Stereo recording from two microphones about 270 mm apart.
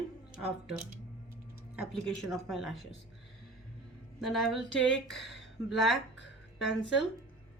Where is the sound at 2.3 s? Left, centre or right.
Centre.